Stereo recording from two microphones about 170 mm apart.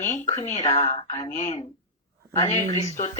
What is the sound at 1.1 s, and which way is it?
Speech, 25° left (ahead or behind).